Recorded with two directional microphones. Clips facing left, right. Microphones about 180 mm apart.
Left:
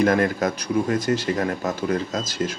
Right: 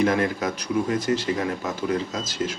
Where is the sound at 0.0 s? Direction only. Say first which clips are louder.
Left 2 dB; 45° left (ahead or behind).